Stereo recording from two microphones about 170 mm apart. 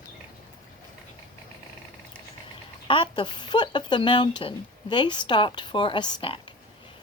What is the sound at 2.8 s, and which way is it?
Speech, 30° left (ahead or behind).